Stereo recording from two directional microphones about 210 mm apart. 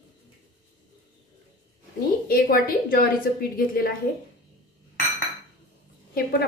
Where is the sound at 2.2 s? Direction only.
45° left (ahead or behind).